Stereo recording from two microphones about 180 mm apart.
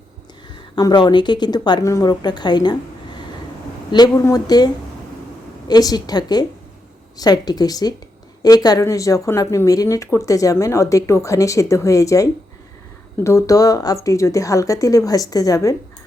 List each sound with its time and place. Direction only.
0.5 s speech: 25° left (ahead or behind)
3.9 s speech: 20° left (ahead or behind)